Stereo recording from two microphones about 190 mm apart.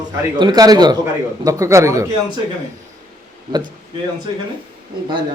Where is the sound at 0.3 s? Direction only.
20° right (ahead or behind).